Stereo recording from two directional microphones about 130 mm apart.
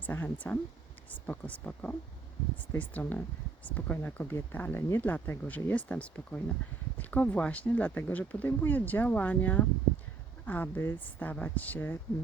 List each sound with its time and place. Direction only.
0.0 s speech: 15° left (ahead or behind)